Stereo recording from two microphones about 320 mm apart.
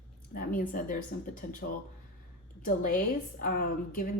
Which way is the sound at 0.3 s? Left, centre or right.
Left.